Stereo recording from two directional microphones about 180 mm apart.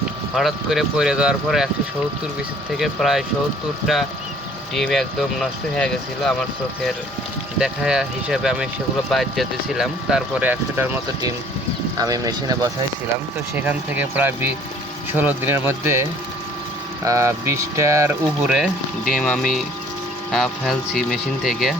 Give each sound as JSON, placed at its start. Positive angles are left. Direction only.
{"t": 0.3, "sound": "speech", "side_deg": 0}
{"t": 2.7, "sound": "speech", "side_deg": 0}
{"t": 7.6, "sound": "speech", "side_deg": -5}
{"t": 13.6, "sound": "speech", "side_deg": -10}
{"t": 18.4, "sound": "speech", "side_deg": -5}